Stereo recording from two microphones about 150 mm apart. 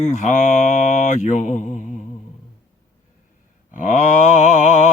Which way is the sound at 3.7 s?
55° left (ahead or behind).